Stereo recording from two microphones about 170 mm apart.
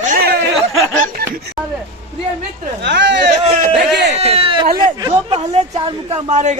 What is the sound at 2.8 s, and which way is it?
Speech, 90° right.